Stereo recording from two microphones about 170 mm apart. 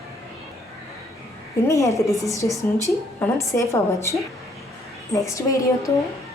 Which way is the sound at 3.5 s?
15° left (ahead or behind).